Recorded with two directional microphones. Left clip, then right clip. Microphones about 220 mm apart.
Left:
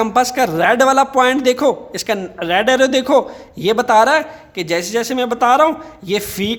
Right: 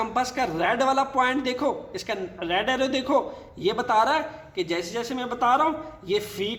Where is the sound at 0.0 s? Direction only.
45° left (ahead or behind).